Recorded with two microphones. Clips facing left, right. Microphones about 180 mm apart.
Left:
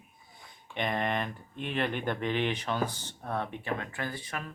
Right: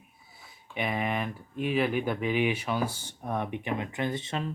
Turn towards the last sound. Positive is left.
turn(degrees=-25)  # may be behind; listen again after turning